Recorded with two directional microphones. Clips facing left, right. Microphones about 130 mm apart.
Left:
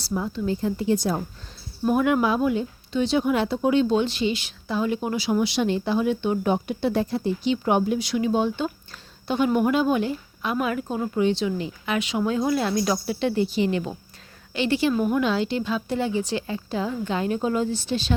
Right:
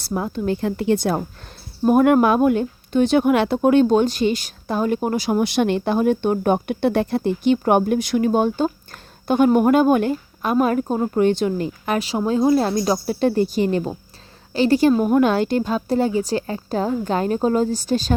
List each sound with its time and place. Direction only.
0.0 s speech: 55° right (ahead or behind)
1.8 s speech: 50° right (ahead or behind)